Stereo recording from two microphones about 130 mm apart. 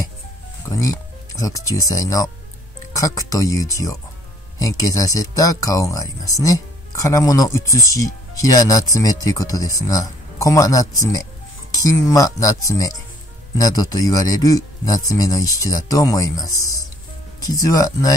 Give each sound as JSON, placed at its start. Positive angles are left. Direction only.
{"t": 0.7, "sound": "speech", "side_deg": 25}